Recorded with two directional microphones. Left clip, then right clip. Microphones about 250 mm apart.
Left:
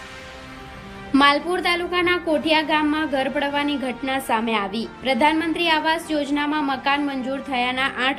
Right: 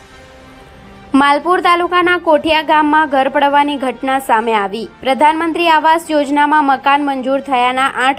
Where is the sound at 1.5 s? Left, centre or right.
Centre.